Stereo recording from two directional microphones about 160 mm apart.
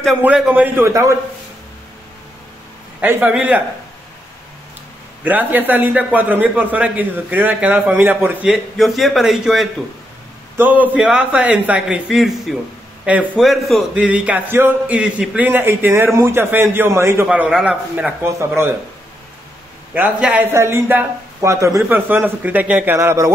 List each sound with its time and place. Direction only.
0.2 s a man's voice: 10° right (ahead or behind)
3.0 s a man's voice: 10° right (ahead or behind)
5.2 s a man's voice: 10° right (ahead or behind)
19.9 s a man's voice: 10° right (ahead or behind)